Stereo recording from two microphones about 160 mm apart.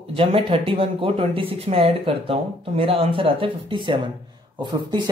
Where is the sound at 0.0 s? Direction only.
35° right (ahead or behind).